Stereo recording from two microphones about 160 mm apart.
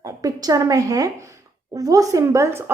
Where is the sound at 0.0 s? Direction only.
20° right (ahead or behind).